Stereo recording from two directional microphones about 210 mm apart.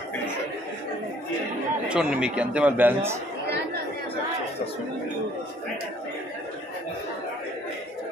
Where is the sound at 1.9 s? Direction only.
5° right (ahead or behind).